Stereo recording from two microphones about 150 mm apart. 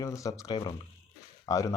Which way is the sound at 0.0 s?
20° left (ahead or behind).